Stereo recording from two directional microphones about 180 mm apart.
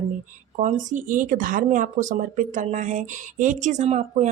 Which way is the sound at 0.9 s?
45° right (ahead or behind).